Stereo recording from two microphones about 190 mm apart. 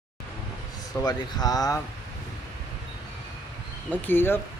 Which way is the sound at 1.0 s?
20° left (ahead or behind).